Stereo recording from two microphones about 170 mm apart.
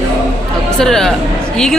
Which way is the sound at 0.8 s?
5° left (ahead or behind).